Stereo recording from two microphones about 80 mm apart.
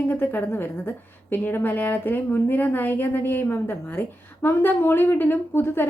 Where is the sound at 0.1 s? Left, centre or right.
Left.